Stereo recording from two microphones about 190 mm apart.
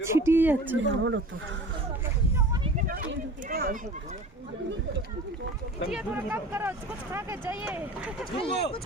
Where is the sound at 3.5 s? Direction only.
50° right (ahead or behind).